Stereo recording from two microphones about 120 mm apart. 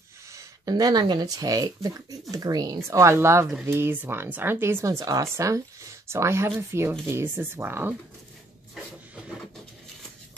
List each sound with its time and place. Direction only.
0.3 s speech: 30° right (ahead or behind)